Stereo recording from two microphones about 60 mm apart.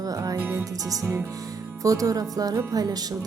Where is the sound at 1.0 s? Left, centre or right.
Right.